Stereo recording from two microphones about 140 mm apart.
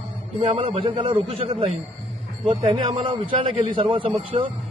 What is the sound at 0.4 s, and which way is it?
A man's voice, 45° right (ahead or behind).